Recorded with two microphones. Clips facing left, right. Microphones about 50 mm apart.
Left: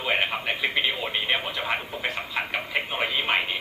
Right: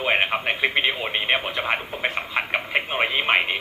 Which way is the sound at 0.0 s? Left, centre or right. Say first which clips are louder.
Right 4 dB; right.